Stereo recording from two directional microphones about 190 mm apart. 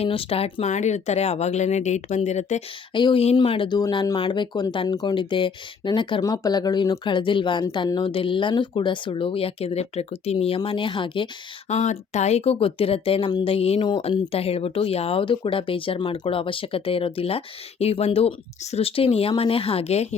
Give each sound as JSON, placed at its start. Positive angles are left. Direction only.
{"t": 0.0, "sound": "speech", "side_deg": 30}
{"t": 2.9, "sound": "speech", "side_deg": 25}
{"t": 11.7, "sound": "speech", "side_deg": 35}